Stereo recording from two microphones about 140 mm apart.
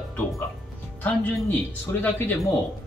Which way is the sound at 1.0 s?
15° left (ahead or behind).